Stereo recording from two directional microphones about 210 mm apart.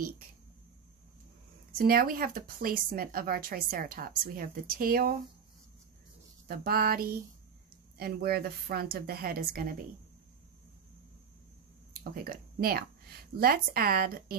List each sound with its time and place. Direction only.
1.8 s speech: 45° right (ahead or behind)
6.4 s speech: 45° right (ahead or behind)
12.1 s speech: 45° right (ahead or behind)